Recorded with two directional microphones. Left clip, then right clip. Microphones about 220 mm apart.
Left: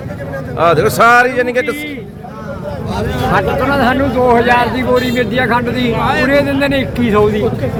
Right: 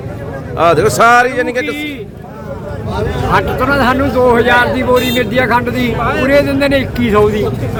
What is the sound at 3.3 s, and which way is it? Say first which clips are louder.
Speech: right 1 dB; 10° right (ahead or behind).